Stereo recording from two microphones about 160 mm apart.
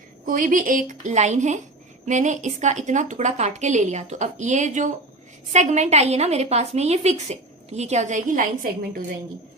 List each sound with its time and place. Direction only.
0.3 s a woman's voice: 55° right (ahead or behind)